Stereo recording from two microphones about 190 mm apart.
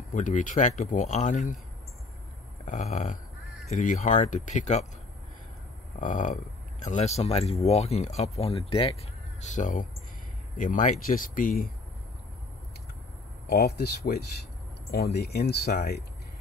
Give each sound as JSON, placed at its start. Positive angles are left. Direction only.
{"t": 0.1, "sound": "speech", "side_deg": 40}
{"t": 2.6, "sound": "speech", "side_deg": 40}
{"t": 5.9, "sound": "speech", "side_deg": 40}
{"t": 9.4, "sound": "speech", "side_deg": 40}
{"t": 13.5, "sound": "speech", "side_deg": 55}